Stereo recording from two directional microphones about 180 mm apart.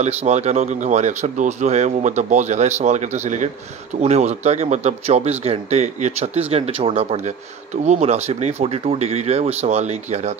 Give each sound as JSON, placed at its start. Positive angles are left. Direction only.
{"t": 0.0, "sound": "speech", "side_deg": -40}